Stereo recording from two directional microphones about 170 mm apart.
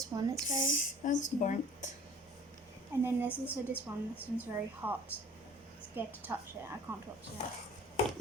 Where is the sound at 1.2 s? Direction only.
45° left (ahead or behind).